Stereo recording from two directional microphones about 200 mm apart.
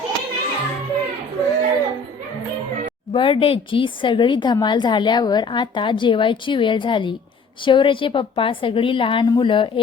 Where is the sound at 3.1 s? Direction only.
25° left (ahead or behind).